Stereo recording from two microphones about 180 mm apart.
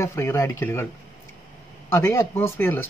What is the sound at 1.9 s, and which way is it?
Speech, 15° left (ahead or behind).